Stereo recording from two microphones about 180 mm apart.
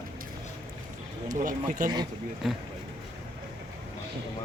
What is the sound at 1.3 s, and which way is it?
Speech, 45° right (ahead or behind).